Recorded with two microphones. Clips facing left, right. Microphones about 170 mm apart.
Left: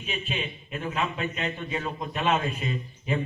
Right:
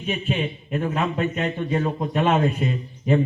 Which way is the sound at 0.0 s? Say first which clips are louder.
Right 7 dB; 45° right (ahead or behind).